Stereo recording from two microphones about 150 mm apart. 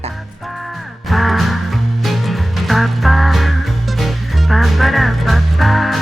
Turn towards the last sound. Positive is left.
turn(degrees=0)  # may be behind; listen again after turning